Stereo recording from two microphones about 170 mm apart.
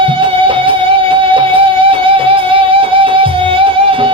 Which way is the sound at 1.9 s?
30° right (ahead or behind).